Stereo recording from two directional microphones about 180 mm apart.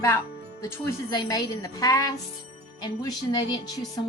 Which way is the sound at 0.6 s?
20° left (ahead or behind).